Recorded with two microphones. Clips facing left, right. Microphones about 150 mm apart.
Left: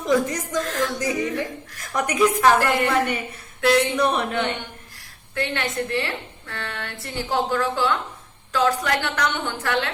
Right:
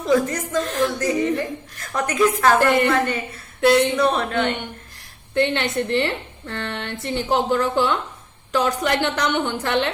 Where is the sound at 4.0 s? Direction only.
15° left (ahead or behind).